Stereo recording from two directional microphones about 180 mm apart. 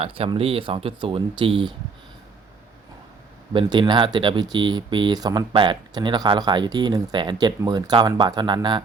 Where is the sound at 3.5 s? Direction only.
25° right (ahead or behind).